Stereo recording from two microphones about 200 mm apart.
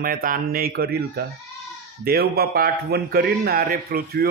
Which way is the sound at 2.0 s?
50° right (ahead or behind).